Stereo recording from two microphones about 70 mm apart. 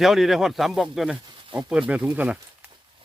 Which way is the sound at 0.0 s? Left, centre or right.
Centre.